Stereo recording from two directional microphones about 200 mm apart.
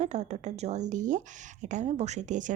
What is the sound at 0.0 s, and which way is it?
Speech, 35° right (ahead or behind).